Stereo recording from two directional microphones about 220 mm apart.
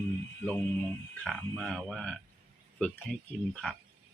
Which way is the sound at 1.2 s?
Centre (ahead or behind).